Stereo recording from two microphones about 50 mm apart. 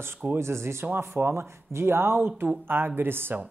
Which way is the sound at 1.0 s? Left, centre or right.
Right.